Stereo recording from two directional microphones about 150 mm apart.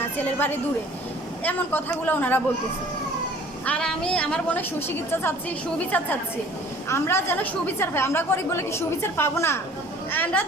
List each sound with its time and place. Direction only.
0.0 s a woman's voice: 10° left (ahead or behind)
3.7 s a woman's voice: 5° left (ahead or behind)